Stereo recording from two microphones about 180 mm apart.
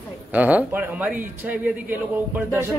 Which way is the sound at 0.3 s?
10° right (ahead or behind).